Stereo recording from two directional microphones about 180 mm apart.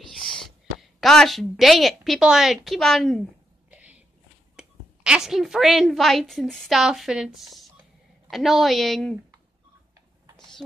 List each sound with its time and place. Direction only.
0.7 s a woman's voice: centre (ahead or behind)
3.7 s a sound: 10° right (ahead or behind)
4.6 s a woman's voice: 5° right (ahead or behind)